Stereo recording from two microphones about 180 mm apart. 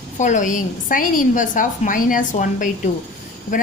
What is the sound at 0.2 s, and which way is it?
A woman's voice, 45° left (ahead or behind).